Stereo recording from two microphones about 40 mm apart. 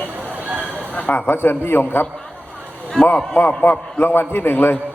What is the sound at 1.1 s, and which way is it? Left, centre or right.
Speech, left.